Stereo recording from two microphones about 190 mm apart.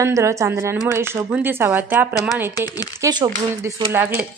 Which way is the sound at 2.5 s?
20° left (ahead or behind).